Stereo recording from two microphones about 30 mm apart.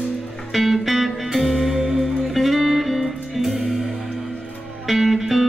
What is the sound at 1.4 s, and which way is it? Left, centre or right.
Music, centre.